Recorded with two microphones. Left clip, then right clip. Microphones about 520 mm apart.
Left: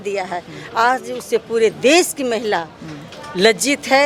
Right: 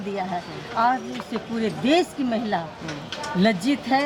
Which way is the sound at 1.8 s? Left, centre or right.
Left.